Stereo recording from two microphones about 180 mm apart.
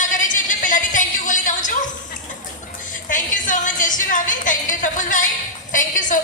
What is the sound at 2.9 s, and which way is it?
Music, 45° left (ahead or behind).